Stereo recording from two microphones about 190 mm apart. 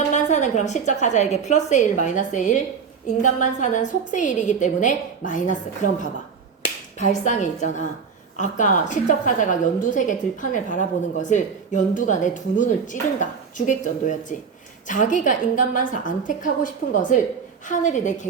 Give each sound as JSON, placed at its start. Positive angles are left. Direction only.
{"t": 0.1, "sound": "a woman's voice", "side_deg": 40}